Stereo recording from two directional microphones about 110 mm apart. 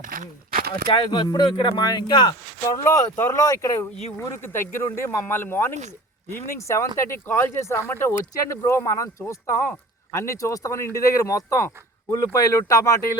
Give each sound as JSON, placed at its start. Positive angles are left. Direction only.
{"t": 0.9, "sound": "speech", "side_deg": 45}
{"t": 2.8, "sound": "speech", "side_deg": 25}